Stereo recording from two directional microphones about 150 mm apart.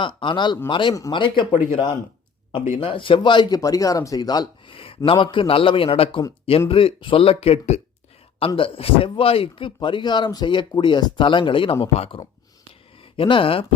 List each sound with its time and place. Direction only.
0.0 s a man's voice: 35° left (ahead or behind)
2.7 s a man's voice: 35° left (ahead or behind)